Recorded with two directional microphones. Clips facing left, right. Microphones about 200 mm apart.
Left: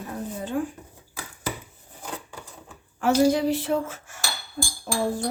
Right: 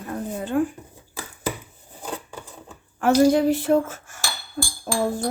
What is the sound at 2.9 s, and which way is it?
Speech, 55° right (ahead or behind).